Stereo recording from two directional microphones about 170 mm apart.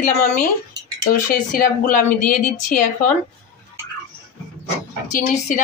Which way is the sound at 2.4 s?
50° left (ahead or behind).